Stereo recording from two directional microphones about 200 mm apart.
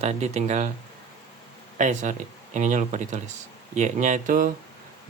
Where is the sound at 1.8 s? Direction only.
40° right (ahead or behind).